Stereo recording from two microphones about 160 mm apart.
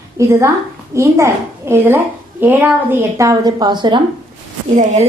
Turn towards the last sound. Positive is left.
turn(degrees=-45)  # may be behind; listen again after turning